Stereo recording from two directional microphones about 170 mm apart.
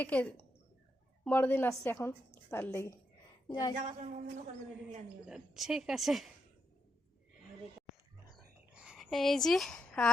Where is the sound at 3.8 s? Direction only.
50° right (ahead or behind).